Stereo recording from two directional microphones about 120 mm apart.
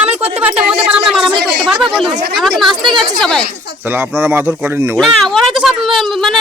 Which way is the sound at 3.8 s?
15° right (ahead or behind).